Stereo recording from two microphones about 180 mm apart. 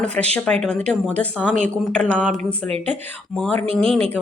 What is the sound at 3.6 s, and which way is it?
Speech, 30° right (ahead or behind).